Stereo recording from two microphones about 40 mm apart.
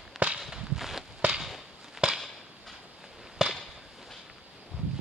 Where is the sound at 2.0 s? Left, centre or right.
Centre.